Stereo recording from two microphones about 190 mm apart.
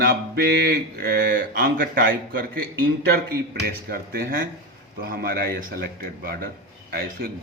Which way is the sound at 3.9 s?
50° right (ahead or behind).